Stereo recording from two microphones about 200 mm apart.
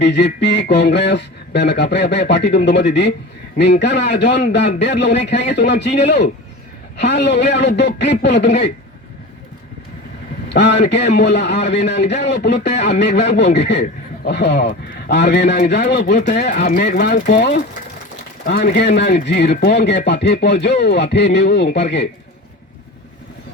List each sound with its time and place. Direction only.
0.0 s speech: 60° left (ahead or behind)
10.5 s speech: 60° left (ahead or behind)